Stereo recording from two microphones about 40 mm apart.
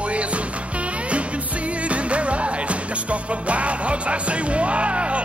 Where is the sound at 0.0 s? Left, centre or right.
Right.